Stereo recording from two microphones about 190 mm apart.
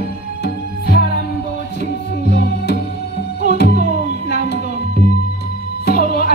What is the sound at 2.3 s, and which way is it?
Music, 60° left (ahead or behind).